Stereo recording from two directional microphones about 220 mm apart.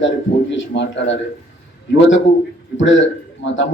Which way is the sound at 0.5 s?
55° left (ahead or behind).